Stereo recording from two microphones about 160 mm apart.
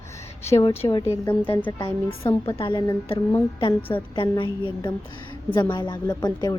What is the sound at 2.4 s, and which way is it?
A woman's voice, 35° left (ahead or behind).